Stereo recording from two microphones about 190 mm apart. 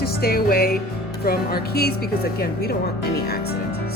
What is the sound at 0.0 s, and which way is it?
A woman's voice, 55° left (ahead or behind).